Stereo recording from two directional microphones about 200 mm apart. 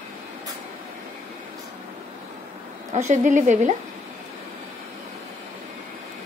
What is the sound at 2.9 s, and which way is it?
Speech, 35° right (ahead or behind).